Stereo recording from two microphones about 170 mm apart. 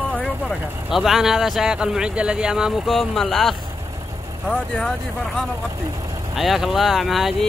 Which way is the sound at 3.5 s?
20° right (ahead or behind).